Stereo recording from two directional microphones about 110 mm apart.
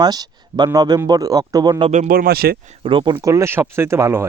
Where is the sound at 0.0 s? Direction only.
35° right (ahead or behind).